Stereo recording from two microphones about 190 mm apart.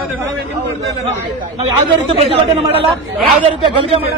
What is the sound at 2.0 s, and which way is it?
Speech, 30° right (ahead or behind).